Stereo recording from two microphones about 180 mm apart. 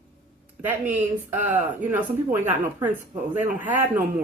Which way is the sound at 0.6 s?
10° right (ahead or behind).